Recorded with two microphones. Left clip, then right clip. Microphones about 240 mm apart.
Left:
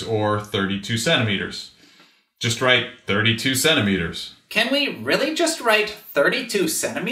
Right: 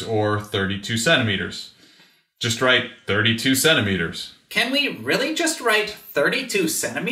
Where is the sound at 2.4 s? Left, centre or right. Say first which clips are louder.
Even; right.